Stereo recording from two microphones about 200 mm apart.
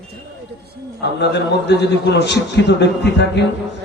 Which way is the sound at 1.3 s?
60° left (ahead or behind).